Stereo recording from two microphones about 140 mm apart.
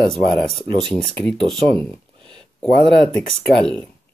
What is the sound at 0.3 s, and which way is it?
Speech, 5° left (ahead or behind).